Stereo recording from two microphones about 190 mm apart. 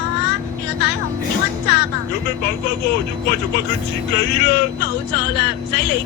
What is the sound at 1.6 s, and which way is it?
Speech, 60° left (ahead or behind).